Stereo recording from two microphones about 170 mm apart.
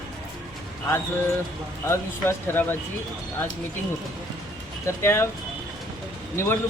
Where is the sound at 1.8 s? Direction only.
15° left (ahead or behind).